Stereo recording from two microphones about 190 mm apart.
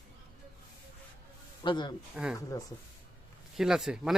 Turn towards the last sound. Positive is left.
turn(degrees=0)  # may be behind; listen again after turning